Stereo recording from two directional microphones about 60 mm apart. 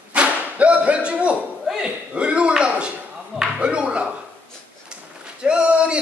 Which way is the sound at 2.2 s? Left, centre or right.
Centre.